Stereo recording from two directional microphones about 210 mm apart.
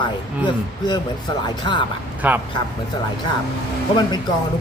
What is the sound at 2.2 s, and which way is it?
Speech, 10° right (ahead or behind).